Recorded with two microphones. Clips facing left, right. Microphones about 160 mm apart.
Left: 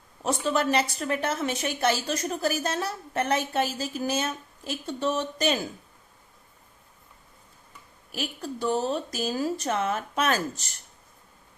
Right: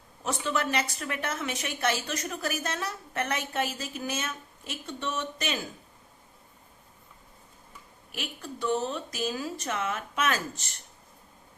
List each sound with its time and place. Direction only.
0.2 s a woman's voice: 35° left (ahead or behind)
8.1 s a woman's voice: 35° left (ahead or behind)